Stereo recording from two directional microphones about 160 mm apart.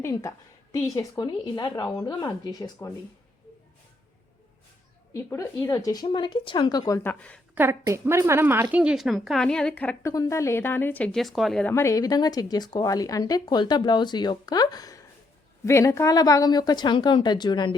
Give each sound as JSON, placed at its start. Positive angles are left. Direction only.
{"t": 0.0, "sound": "speech", "side_deg": 20}
{"t": 5.1, "sound": "speech", "side_deg": 20}
{"t": 7.5, "sound": "a woman's voice", "side_deg": -15}
{"t": 11.7, "sound": "speech", "side_deg": 20}